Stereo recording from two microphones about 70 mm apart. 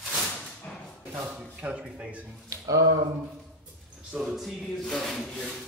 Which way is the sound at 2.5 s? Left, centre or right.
Right.